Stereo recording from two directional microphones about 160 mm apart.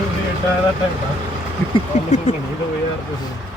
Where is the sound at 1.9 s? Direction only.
50° left (ahead or behind).